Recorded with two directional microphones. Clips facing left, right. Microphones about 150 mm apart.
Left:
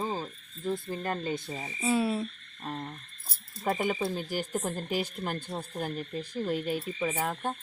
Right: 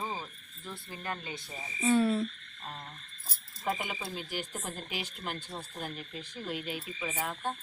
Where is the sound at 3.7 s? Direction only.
40° left (ahead or behind).